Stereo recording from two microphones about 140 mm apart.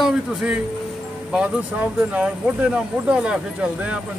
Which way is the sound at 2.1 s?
5° right (ahead or behind).